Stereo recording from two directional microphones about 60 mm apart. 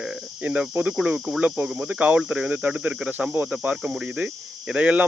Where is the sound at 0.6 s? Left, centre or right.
Centre.